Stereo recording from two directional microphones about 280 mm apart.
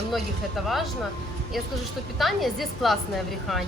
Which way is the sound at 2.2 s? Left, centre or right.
Centre.